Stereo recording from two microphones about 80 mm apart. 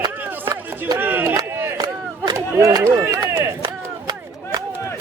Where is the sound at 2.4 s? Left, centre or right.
Right.